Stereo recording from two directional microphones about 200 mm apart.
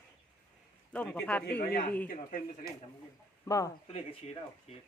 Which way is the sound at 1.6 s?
45° left (ahead or behind).